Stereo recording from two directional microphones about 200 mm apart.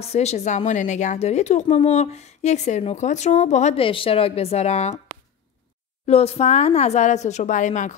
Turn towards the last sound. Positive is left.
turn(degrees=40)  # may be behind; listen again after turning